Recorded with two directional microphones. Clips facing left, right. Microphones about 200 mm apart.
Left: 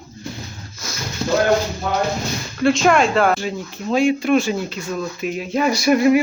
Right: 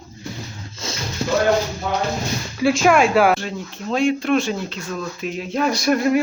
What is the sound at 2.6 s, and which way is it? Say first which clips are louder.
Speech: even; 5° right (ahead or behind).